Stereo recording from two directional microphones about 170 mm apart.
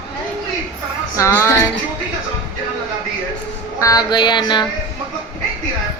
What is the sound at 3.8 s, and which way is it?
Music, 20° left (ahead or behind).